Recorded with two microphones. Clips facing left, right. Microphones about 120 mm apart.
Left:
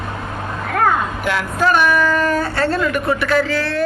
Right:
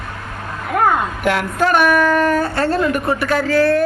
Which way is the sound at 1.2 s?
55° right (ahead or behind).